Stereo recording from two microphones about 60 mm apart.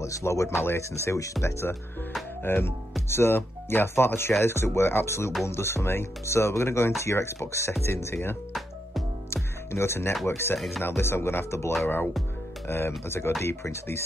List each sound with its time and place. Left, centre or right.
0.0 s speech: left
1.0 s speech: left
1.4 s speech: left
9.3 s music: left
10.2 s speech: left